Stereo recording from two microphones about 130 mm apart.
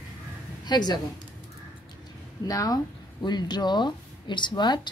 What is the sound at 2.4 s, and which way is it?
Speech, 30° left (ahead or behind).